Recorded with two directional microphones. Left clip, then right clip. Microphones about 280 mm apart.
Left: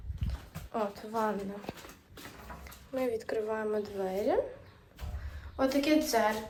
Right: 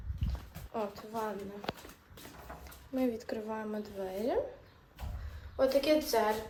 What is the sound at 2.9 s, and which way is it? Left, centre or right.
A woman's voice, centre.